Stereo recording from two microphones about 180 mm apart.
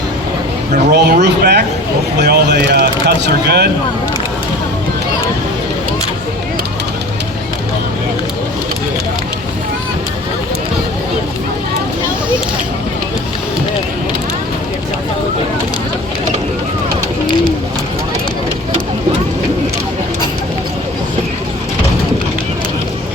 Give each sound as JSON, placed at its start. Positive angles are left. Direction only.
{"t": 0.9, "sound": "speech", "side_deg": -65}